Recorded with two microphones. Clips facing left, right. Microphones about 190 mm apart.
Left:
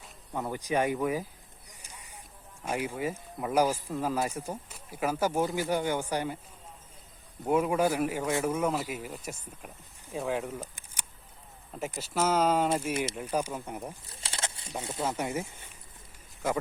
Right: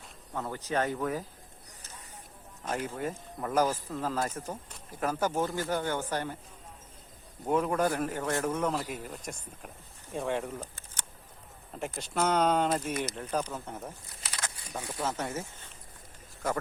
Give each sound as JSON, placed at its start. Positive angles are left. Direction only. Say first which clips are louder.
{"t": 0.3, "sound": "speech", "louder": "left 2 dB", "side_deg": 15}
{"t": 1.8, "sound": "a sound", "louder": "even", "side_deg": 10}
{"t": 2.6, "sound": "speech", "louder": "left 2 dB", "side_deg": 10}
{"t": 7.4, "sound": "speech", "louder": "left 2 dB", "side_deg": 10}
{"t": 14.2, "sound": "a sound", "louder": "left 3 dB", "side_deg": 25}
{"t": 15.0, "sound": "speech", "louder": "left 2 dB", "side_deg": 10}